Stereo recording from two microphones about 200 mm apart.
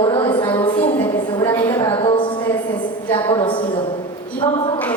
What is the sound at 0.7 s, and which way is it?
Speech, 10° left (ahead or behind).